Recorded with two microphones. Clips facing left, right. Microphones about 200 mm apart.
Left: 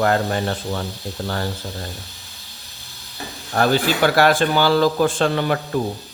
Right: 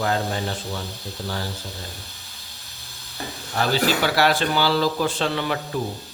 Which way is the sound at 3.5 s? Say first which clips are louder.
Left 3 dB; 50° left (ahead or behind).